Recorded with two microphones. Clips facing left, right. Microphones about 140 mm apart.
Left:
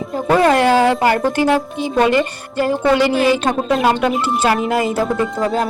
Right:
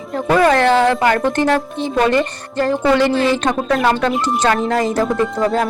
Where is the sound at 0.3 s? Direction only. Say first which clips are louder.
Even; 10° left (ahead or behind).